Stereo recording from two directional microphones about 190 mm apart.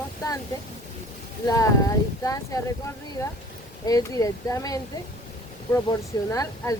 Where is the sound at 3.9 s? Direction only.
20° left (ahead or behind).